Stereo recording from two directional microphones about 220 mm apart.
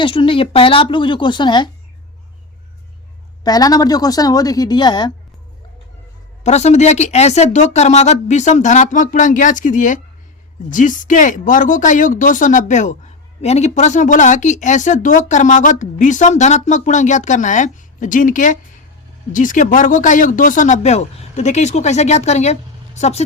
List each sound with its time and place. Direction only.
0.0 s a woman's voice: 25° left (ahead or behind)
3.4 s a woman's voice: 15° left (ahead or behind)
6.4 s speech: 30° left (ahead or behind)